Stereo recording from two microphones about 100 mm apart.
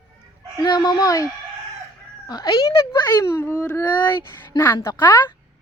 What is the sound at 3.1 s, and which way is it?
Speech, 30° left (ahead or behind).